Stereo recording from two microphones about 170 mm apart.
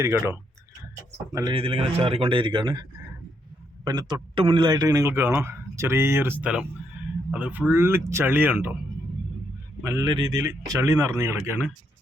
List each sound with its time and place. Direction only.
0.0 s a man's voice: 15° right (ahead or behind)
1.5 s speech: 30° right (ahead or behind)
3.8 s a man's voice: 25° right (ahead or behind)
9.8 s speech: 20° right (ahead or behind)